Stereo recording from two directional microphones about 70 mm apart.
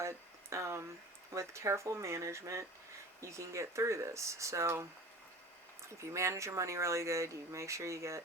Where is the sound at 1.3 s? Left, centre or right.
Right.